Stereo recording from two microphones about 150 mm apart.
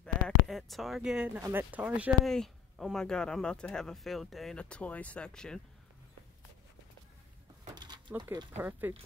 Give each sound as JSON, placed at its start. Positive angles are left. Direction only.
{"t": 0.0, "sound": "speech", "side_deg": 0}
{"t": 2.2, "sound": "speech", "side_deg": 0}
{"t": 7.7, "sound": "a sound", "side_deg": -30}
{"t": 8.5, "sound": "speech", "side_deg": -15}